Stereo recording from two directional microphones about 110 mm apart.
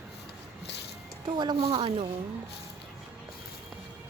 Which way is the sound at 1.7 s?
55° right (ahead or behind).